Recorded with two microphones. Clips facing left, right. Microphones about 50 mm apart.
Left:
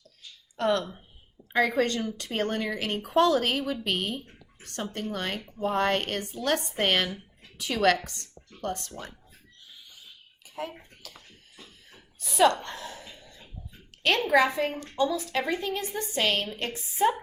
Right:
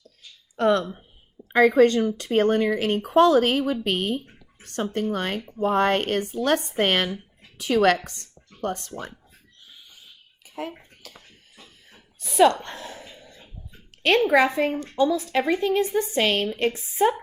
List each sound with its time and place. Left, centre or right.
0.6 s a woman's voice: right
12.4 s a woman's voice: right
14.0 s a woman's voice: right